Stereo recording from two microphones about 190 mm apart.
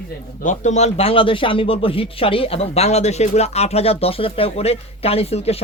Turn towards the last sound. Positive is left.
turn(degrees=30)  # may be behind; listen again after turning